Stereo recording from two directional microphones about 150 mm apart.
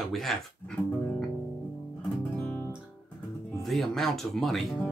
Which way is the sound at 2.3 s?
15° left (ahead or behind).